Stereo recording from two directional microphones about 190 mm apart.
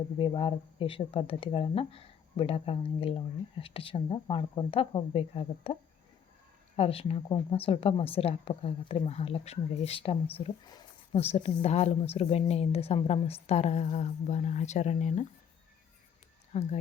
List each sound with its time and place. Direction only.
0.2 s speech: 30° left (ahead or behind)
6.7 s a woman's voice: 30° left (ahead or behind)
16.5 s a woman's voice: 35° left (ahead or behind)